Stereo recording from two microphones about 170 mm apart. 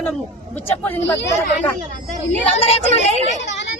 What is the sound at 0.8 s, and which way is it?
Speech, 10° left (ahead or behind).